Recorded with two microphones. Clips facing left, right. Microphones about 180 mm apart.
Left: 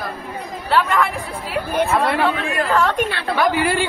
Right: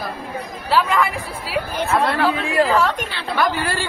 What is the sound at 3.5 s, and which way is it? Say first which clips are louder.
Speech: left 5 dB; 15° left (ahead or behind).